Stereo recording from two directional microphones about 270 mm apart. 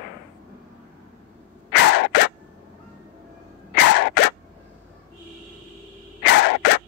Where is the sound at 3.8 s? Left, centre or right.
Left.